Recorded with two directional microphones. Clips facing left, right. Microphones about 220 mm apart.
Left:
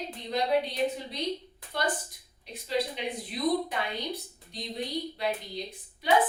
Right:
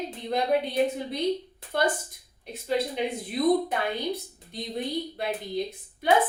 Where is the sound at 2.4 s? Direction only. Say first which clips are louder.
Right 3 dB; 50° right (ahead or behind).